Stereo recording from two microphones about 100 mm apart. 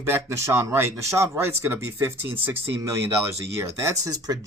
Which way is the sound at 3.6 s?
30° right (ahead or behind).